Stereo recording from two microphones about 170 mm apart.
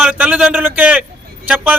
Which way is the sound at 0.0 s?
10° right (ahead or behind).